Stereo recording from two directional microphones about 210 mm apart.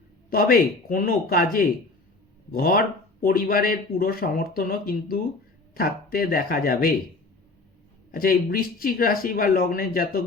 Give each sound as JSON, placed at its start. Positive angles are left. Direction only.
{"t": 0.3, "sound": "speech", "side_deg": 45}
{"t": 8.1, "sound": "speech", "side_deg": 45}